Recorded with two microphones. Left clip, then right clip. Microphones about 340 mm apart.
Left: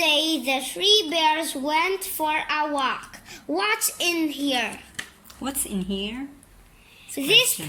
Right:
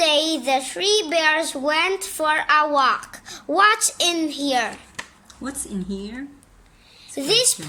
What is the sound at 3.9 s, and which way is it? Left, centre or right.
Speech, right.